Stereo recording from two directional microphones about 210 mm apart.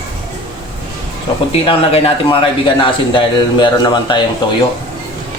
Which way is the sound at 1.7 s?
25° left (ahead or behind).